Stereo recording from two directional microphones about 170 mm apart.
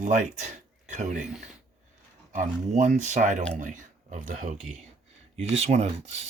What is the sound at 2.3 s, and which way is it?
Speech, 45° right (ahead or behind).